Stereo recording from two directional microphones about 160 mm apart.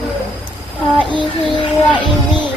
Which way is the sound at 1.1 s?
30° left (ahead or behind).